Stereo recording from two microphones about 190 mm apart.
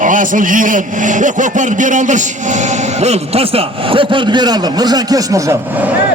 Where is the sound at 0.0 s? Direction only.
45° right (ahead or behind).